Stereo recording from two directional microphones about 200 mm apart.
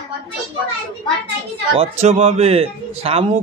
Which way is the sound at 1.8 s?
35° right (ahead or behind).